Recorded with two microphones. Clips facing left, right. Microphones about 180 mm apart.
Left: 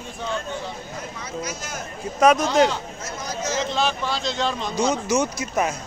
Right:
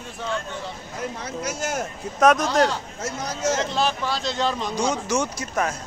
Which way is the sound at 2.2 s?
Centre (ahead or behind).